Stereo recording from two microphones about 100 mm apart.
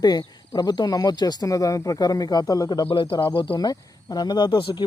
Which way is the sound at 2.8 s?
65° left (ahead or behind).